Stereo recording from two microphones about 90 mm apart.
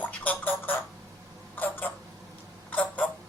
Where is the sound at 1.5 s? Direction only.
20° left (ahead or behind).